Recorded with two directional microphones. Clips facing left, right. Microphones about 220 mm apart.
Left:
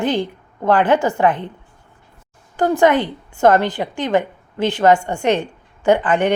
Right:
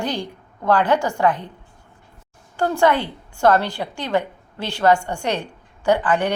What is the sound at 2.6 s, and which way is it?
A woman's voice, 15° left (ahead or behind).